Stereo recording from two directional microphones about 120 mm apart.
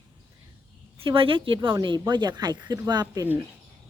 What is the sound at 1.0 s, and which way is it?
Speech, 50° right (ahead or behind).